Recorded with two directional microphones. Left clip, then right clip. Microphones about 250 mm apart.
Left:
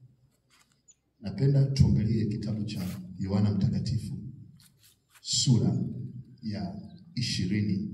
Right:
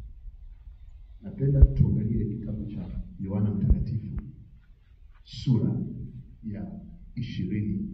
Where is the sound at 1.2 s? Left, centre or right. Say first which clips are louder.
Even; left.